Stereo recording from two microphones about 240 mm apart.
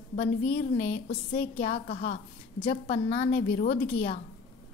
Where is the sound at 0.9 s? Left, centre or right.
Left.